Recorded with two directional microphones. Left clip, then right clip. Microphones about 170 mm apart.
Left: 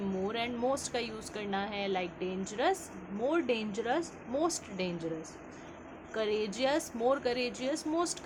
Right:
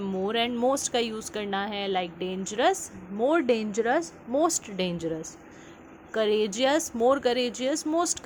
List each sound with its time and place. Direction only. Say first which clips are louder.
0.0 s a woman's voice: right 7 dB; 45° right (ahead or behind)